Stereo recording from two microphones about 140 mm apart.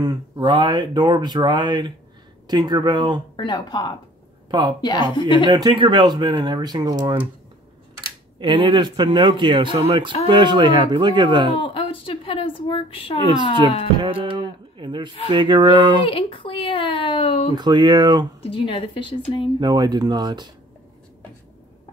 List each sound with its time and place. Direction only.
0.0 s speech: 30° right (ahead or behind)
3.3 s speech: 30° left (ahead or behind)
4.5 s a woman's voice: 30° right (ahead or behind)
4.8 s speech: 35° left (ahead or behind)
5.5 s speech: 30° right (ahead or behind)
8.4 s speech: 35° right (ahead or behind)
11.6 s speech: 40° left (ahead or behind)
13.9 s speech: 40° right (ahead or behind)
16.1 s speech: 40° left (ahead or behind)
17.6 s speech: 30° right (ahead or behind)
18.4 s speech: 40° left (ahead or behind)
19.6 s speech: 30° right (ahead or behind)